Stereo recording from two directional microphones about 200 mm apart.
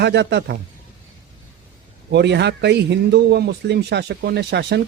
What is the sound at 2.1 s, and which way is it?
A man's voice, 60° right (ahead or behind).